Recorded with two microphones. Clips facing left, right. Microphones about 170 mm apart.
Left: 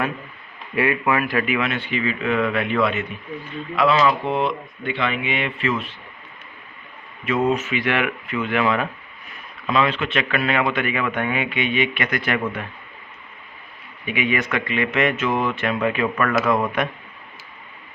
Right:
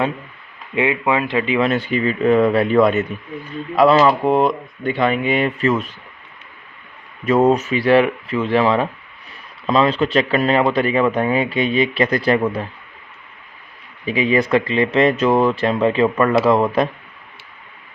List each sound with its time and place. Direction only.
0.8 s speech: 20° right (ahead or behind); by 5.9 s 40° right (ahead or behind)
7.3 s speech: 40° right (ahead or behind)
14.0 s speech: 35° right (ahead or behind)